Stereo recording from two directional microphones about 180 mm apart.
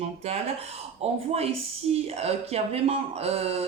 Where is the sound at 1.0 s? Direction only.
35° right (ahead or behind).